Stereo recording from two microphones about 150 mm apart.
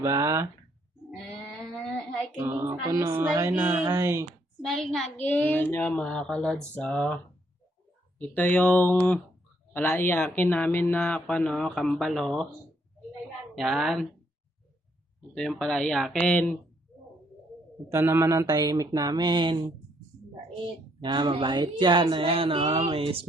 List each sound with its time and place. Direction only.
0.0 s speech: 20° right (ahead or behind)
1.4 s a sound: 5° left (ahead or behind)
2.4 s speech: 15° right (ahead or behind)
4.6 s speech: centre (ahead or behind)
8.3 s speech: 10° left (ahead or behind)
13.6 s speech: centre (ahead or behind)
15.4 s speech: 5° left (ahead or behind)
17.8 s speech: 20° right (ahead or behind)
21.0 s speech: 30° right (ahead or behind)